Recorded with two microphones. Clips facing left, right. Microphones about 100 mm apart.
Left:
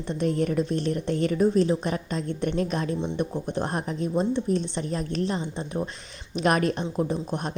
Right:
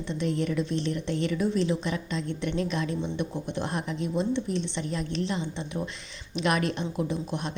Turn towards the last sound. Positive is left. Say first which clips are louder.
# left 2 dB
turn(degrees=40)  # may be behind; listen again after turning